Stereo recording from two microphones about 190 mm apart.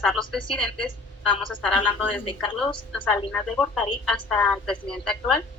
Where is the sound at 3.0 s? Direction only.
25° left (ahead or behind).